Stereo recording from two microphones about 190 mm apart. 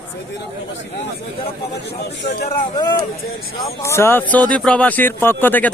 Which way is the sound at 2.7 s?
20° left (ahead or behind).